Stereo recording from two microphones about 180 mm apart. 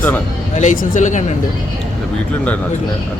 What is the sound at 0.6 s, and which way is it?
Speech, 40° left (ahead or behind).